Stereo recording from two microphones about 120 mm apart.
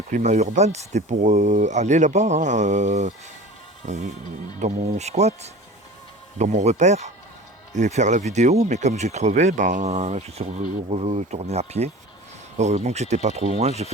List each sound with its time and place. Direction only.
0.1 s speech: 75° right (ahead or behind)
4.6 s speech: 70° right (ahead or behind)